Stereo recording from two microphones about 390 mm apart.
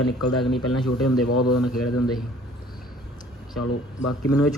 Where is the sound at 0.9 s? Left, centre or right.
Left.